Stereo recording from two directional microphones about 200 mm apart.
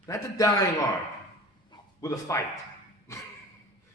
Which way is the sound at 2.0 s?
15° left (ahead or behind).